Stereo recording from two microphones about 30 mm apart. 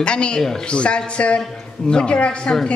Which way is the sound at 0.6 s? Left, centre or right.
Left.